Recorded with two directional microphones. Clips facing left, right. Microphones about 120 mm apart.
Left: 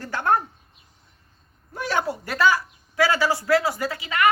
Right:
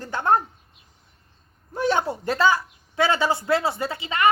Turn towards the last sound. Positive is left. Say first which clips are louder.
# even
turn(degrees=-25)  # may be behind; listen again after turning